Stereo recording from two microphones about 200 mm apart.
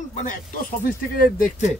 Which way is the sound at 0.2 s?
40° left (ahead or behind).